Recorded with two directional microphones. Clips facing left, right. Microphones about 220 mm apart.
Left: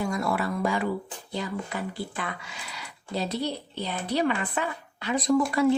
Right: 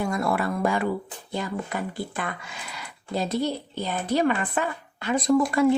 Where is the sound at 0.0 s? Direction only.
55° right (ahead or behind).